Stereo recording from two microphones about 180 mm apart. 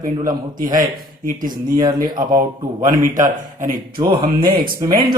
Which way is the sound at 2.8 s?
45° right (ahead or behind).